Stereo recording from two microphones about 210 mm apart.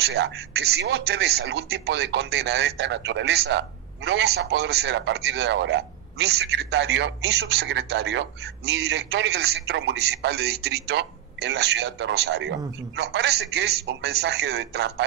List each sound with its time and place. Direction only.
0.0 s a man's voice: 50° right (ahead or behind)